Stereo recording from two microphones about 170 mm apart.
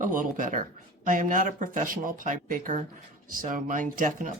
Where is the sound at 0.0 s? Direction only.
50° right (ahead or behind).